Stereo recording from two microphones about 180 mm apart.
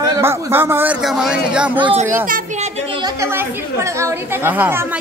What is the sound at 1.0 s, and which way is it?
Speech, centre (ahead or behind).